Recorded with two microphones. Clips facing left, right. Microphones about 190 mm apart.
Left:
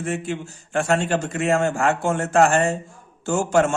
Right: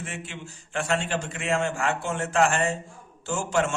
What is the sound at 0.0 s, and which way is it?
A man's voice, 45° left (ahead or behind).